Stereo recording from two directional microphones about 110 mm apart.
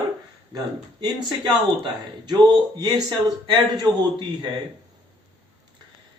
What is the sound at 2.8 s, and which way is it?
A man's voice, 35° right (ahead or behind).